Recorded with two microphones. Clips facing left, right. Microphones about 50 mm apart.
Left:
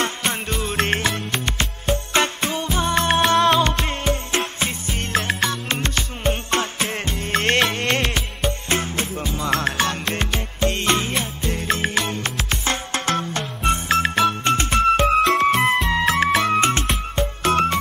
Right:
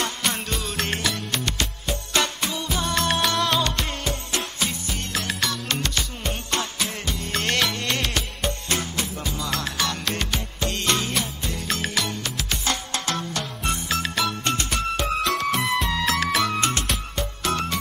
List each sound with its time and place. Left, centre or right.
0.0 s music: left